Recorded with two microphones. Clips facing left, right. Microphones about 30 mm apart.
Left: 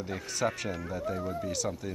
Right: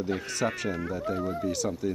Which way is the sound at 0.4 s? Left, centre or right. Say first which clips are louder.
Even; centre.